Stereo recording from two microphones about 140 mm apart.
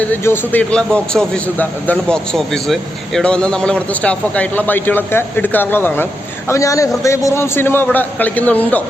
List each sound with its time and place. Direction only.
0.1 s a man's voice: 10° left (ahead or behind)